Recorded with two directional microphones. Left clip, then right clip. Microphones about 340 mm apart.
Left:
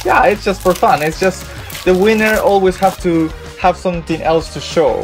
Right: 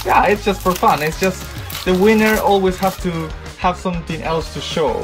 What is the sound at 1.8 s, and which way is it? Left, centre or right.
Speech, centre.